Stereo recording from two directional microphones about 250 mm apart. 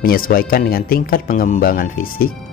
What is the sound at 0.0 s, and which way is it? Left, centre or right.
Speech, left.